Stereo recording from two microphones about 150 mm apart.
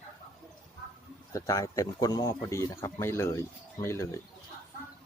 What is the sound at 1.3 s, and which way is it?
Speech, 20° left (ahead or behind).